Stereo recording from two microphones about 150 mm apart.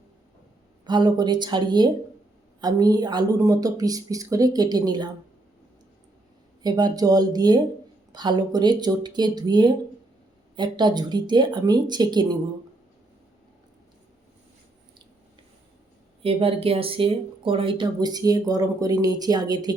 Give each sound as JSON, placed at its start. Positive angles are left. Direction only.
{"t": 0.9, "sound": "speech", "side_deg": -30}
{"t": 6.6, "sound": "speech", "side_deg": -25}
{"t": 16.2, "sound": "speech", "side_deg": -40}